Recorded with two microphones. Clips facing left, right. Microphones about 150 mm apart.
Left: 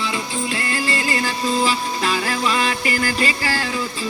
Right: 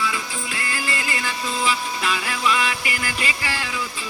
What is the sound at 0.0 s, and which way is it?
Music, 30° left (ahead or behind).